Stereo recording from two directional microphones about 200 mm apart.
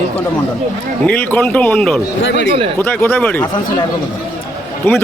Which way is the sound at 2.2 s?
70° left (ahead or behind).